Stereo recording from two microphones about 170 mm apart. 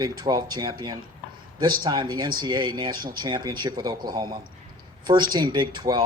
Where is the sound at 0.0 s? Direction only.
25° right (ahead or behind).